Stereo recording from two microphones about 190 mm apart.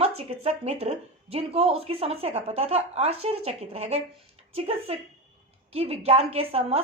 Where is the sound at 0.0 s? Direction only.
30° right (ahead or behind).